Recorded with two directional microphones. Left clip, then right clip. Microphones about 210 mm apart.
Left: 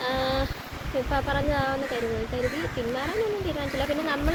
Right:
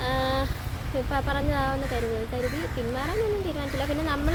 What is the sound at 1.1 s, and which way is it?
Speech, 15° right (ahead or behind).